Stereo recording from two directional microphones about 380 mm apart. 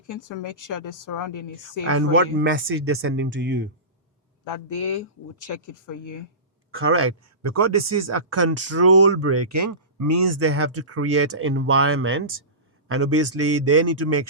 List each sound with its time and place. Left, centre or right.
0.1 s speech: left
1.9 s a man's voice: right
4.4 s speech: left
6.7 s a man's voice: right